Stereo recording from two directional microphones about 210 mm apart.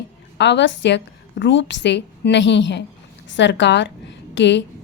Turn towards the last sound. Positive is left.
turn(degrees=55)  # may be behind; listen again after turning